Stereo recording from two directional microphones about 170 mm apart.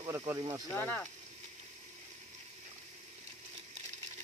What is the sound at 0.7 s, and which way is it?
Speech, 10° left (ahead or behind).